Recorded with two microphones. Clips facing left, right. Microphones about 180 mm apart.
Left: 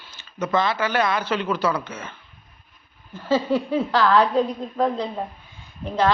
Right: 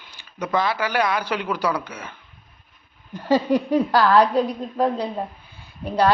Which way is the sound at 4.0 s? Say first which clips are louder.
Right 1 dB; 35° right (ahead or behind).